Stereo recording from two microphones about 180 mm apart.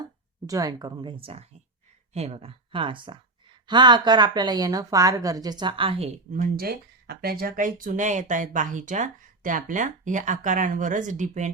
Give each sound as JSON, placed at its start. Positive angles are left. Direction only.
{"t": 0.4, "sound": "a woman's voice", "side_deg": -20}
{"t": 6.3, "sound": "speech", "side_deg": -50}